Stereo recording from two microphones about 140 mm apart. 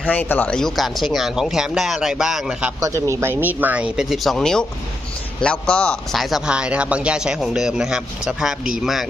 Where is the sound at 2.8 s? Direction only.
20° right (ahead or behind).